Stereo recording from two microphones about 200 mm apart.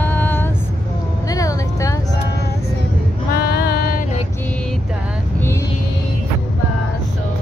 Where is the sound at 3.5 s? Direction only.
50° left (ahead or behind).